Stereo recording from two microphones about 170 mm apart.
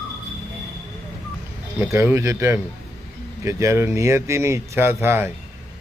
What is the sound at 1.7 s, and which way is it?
A man's voice, 15° right (ahead or behind).